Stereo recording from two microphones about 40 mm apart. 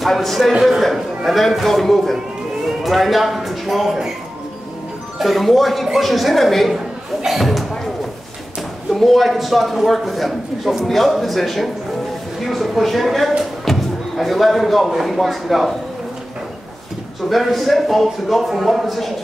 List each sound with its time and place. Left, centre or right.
0.0 s a man's voice: centre
5.2 s a man's voice: centre
8.9 s a man's voice: centre
13.4 s a sound: centre
14.9 s a man's voice: centre
17.3 s a man's voice: centre